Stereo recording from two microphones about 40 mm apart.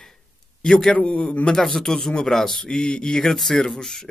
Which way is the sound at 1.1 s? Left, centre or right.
Left.